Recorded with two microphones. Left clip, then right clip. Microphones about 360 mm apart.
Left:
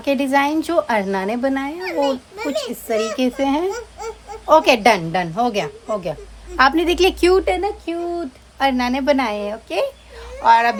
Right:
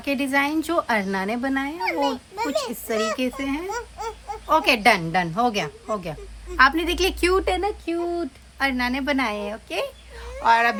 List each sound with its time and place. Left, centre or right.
0.0 s speech: centre
1.8 s a child's voice: centre
3.2 s speech: centre
3.7 s baby cry: centre
4.4 s speech: centre